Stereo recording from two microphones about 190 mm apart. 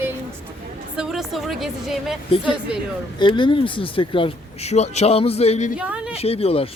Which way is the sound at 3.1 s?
25° left (ahead or behind).